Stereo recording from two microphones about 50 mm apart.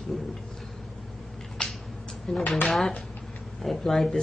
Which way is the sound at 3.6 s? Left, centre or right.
Centre.